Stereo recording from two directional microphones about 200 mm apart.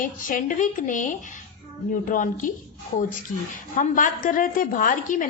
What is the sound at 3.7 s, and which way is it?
A woman's voice, 40° left (ahead or behind).